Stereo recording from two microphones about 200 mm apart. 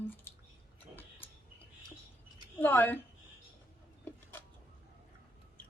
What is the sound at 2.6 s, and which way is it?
Speech, 10° left (ahead or behind).